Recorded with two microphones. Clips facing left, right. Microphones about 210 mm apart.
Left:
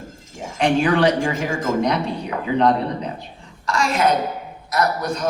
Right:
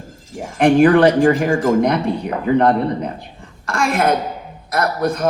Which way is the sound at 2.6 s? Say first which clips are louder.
Right 1 dB; 55° right (ahead or behind).